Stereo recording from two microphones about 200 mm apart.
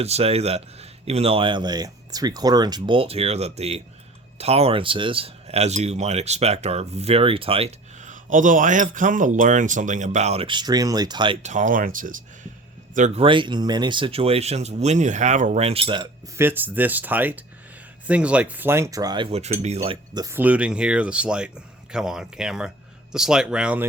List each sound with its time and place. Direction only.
0.0 s speech: 30° right (ahead or behind)
11.4 s a man's voice: 40° right (ahead or behind)
13.2 s speech: 25° right (ahead or behind)
16.4 s speech: 10° right (ahead or behind); by 20.2 s 30° right (ahead or behind)
20.2 s speech: 10° right (ahead or behind)